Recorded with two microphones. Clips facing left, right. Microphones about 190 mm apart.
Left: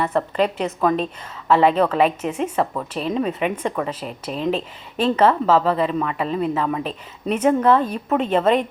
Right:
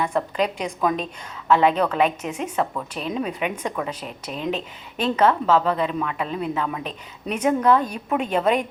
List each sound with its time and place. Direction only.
0.0 s speech: 5° left (ahead or behind)
7.9 s a woman's voice: 5° right (ahead or behind)